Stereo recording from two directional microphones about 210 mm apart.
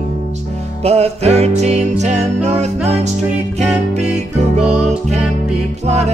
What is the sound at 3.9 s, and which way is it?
Music, 30° right (ahead or behind).